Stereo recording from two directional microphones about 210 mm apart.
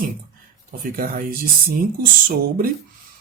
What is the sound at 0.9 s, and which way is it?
Speech, 40° right (ahead or behind).